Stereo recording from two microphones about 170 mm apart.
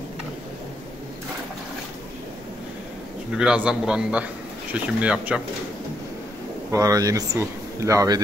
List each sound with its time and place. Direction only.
3.3 s a man's voice: 5° right (ahead or behind)
6.7 s speech: 20° right (ahead or behind)